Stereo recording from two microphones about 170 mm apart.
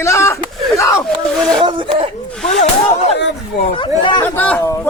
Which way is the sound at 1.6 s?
30° right (ahead or behind).